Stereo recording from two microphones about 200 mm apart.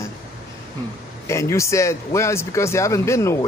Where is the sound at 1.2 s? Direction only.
15° left (ahead or behind).